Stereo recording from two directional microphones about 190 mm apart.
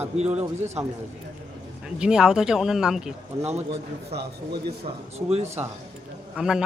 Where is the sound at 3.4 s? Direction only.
35° right (ahead or behind).